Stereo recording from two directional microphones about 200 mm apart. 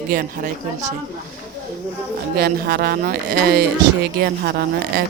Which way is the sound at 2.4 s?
50° right (ahead or behind).